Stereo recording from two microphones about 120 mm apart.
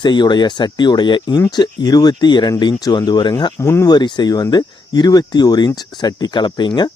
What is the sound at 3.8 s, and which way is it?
Speech, 35° left (ahead or behind).